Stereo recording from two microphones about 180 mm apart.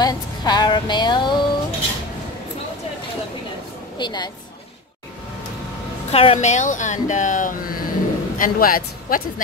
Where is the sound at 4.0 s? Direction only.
25° left (ahead or behind).